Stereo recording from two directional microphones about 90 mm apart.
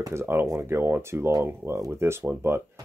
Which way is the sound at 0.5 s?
25° right (ahead or behind).